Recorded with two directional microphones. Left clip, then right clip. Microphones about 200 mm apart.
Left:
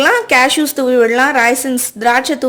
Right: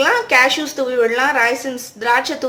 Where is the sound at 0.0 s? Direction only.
50° left (ahead or behind).